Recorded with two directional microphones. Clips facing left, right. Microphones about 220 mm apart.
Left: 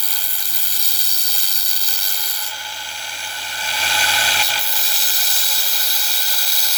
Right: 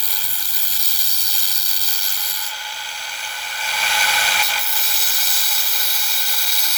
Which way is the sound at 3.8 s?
30° left (ahead or behind).